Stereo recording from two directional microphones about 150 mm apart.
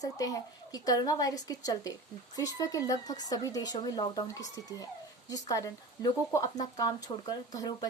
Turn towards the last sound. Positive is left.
turn(degrees=25)  # may be behind; listen again after turning